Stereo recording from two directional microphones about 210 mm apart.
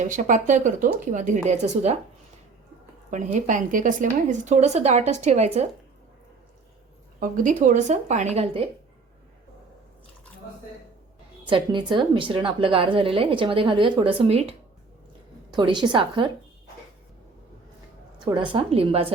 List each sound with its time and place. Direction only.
0.0 s a woman's voice: 35° right (ahead or behind)
3.4 s a woman's voice: 40° right (ahead or behind)
7.2 s a woman's voice: 35° right (ahead or behind)
11.4 s a woman's voice: 25° right (ahead or behind)
18.3 s a woman's voice: 25° right (ahead or behind)